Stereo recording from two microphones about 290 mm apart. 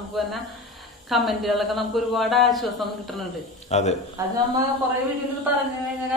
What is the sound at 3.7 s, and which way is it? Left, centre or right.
Speech, left.